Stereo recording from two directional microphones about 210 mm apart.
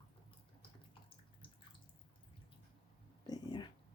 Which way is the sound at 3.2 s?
20° left (ahead or behind).